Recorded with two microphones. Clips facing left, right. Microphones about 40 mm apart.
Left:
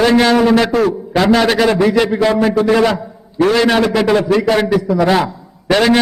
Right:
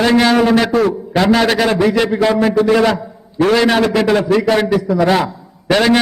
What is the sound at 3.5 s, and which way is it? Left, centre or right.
A man's voice, centre.